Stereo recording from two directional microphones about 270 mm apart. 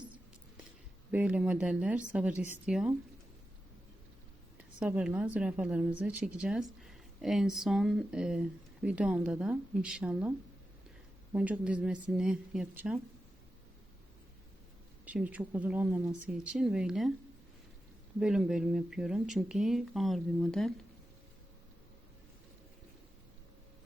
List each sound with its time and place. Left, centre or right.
1.1 s a woman's voice: centre
4.8 s a woman's voice: centre
11.3 s a woman's voice: centre
15.0 s a woman's voice: centre
18.2 s a woman's voice: centre